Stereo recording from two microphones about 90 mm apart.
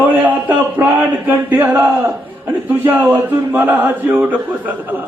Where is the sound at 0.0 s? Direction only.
20° right (ahead or behind).